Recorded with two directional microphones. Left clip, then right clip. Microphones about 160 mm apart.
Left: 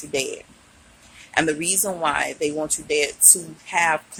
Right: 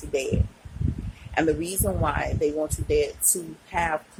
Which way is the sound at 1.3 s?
5° right (ahead or behind).